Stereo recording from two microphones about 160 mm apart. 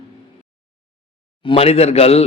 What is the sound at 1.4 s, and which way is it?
Speech, 35° left (ahead or behind).